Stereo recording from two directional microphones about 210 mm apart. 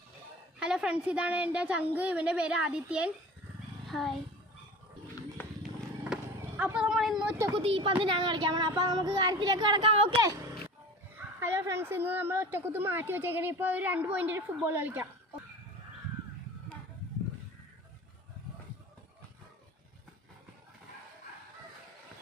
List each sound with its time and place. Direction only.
0.6 s a woman's voice: 5° right (ahead or behind)
6.6 s a woman's voice: 5° right (ahead or behind)
7.5 s speech: 25° right (ahead or behind)
11.3 s a woman's voice: 10° right (ahead or behind)